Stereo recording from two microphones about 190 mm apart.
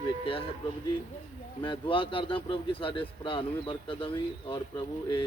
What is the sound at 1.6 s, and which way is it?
A man's voice, 25° left (ahead or behind).